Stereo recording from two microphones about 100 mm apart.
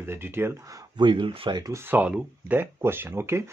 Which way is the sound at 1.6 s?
25° right (ahead or behind).